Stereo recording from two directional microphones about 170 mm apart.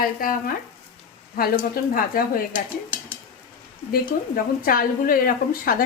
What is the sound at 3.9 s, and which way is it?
A woman's voice, 60° left (ahead or behind).